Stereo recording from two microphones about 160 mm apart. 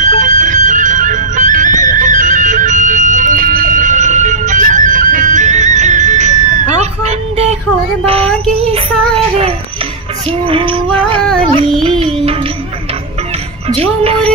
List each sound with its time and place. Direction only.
0.0 s music: 50° right (ahead or behind)
8.0 s child singing: 40° right (ahead or behind)
10.4 s female singing: 35° right (ahead or behind)
11.2 s music: 5° left (ahead or behind)
11.8 s music: 30° right (ahead or behind)